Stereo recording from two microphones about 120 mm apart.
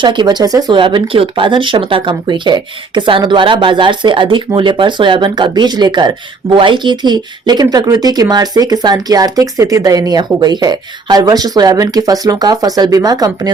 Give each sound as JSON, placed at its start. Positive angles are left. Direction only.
{"t": 0.0, "sound": "speech", "side_deg": -40}
{"t": 0.7, "sound": "speech", "side_deg": -45}